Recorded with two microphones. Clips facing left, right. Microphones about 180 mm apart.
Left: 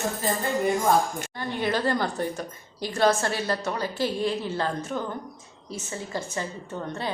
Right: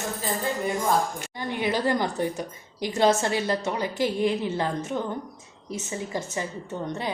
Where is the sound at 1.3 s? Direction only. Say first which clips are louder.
Even; 15° right (ahead or behind).